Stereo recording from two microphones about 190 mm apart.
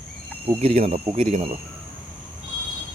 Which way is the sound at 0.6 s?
30° right (ahead or behind).